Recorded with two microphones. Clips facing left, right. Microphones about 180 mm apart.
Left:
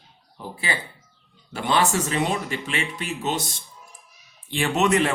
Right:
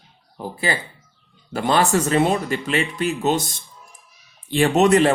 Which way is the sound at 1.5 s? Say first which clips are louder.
Right 4 dB; 45° right (ahead or behind).